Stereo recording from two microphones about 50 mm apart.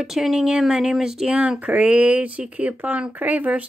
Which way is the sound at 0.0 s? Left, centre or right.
Centre.